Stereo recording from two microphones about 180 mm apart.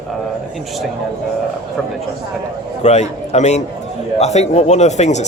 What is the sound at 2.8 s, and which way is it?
A man's voice, 40° left (ahead or behind).